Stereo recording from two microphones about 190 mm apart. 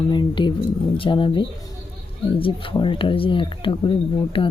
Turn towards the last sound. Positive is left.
turn(degrees=25)  # may be behind; listen again after turning